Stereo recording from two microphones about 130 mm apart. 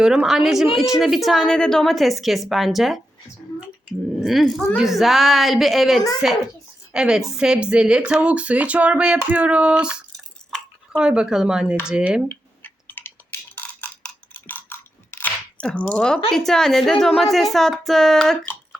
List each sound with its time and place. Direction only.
0.0 s a woman's voice: 5° right (ahead or behind)
4.2 s a woman's voice: centre (ahead or behind)
12.3 s a sound: 15° left (ahead or behind)
16.3 s a woman's voice: 5° left (ahead or behind)